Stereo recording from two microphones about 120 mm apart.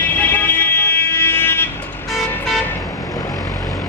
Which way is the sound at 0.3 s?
15° left (ahead or behind).